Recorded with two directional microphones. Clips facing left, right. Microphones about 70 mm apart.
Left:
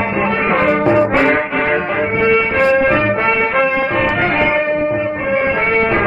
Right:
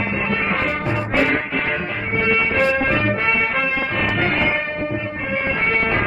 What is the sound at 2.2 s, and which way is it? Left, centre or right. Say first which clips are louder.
Music: left 4 dB; left.